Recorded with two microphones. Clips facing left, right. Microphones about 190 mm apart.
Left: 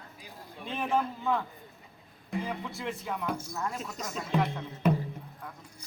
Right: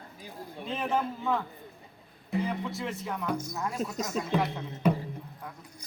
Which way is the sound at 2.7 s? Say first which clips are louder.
Right 1 dB; centre (ahead or behind).